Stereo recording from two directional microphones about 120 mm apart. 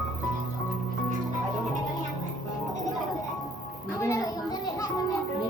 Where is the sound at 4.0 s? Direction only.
25° left (ahead or behind).